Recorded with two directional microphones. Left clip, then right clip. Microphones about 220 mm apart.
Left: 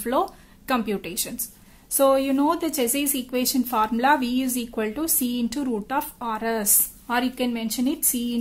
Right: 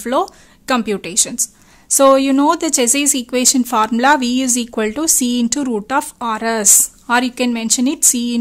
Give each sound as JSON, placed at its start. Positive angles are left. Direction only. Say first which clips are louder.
{"t": 0.0, "sound": "speech", "louder": "right 6 dB", "side_deg": -35}